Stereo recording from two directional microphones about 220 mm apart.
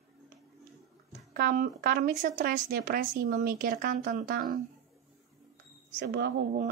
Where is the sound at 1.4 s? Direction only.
40° right (ahead or behind).